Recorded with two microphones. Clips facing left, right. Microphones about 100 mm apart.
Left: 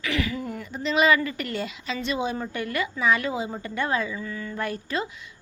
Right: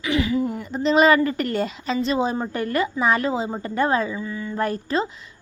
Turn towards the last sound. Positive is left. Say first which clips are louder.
# right 6 dB
turn(degrees=-35)  # may be behind; listen again after turning